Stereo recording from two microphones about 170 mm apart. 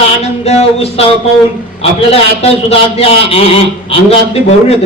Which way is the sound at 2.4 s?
35° left (ahead or behind).